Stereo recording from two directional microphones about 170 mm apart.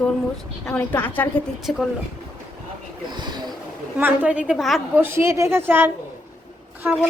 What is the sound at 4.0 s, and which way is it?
Speech, 10° right (ahead or behind).